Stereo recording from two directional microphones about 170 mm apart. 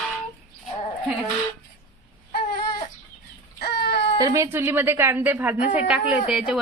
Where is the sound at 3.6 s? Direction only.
65° left (ahead or behind).